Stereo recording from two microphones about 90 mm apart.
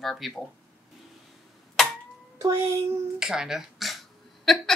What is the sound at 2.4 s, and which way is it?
Speech, 30° right (ahead or behind).